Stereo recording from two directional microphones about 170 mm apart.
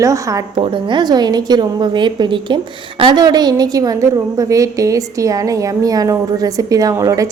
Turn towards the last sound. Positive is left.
turn(degrees=-20)  # may be behind; listen again after turning